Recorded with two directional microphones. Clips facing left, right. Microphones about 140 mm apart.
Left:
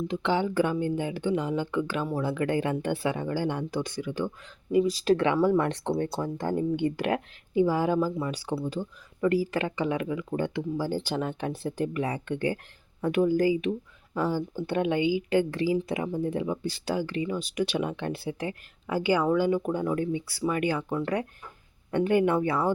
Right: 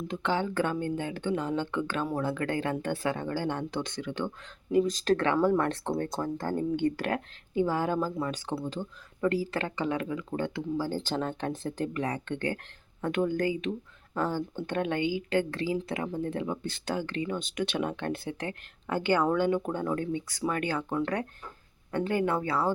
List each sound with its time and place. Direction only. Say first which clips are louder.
0.3 s speech: left 3 dB; 15° left (ahead or behind)